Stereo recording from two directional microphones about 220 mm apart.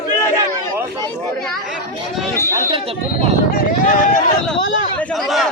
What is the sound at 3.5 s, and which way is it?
Run, 35° left (ahead or behind).